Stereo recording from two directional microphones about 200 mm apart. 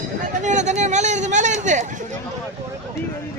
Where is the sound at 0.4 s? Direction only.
35° right (ahead or behind).